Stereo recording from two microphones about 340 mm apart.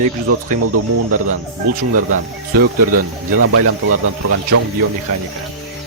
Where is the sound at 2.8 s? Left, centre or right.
Right.